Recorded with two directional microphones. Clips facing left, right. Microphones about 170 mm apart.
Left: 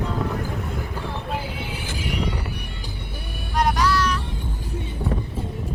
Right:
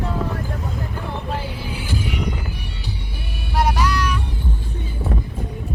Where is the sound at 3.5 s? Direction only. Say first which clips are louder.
Even; 5° right (ahead or behind).